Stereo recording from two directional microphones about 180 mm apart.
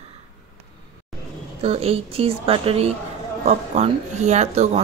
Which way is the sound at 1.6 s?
35° right (ahead or behind).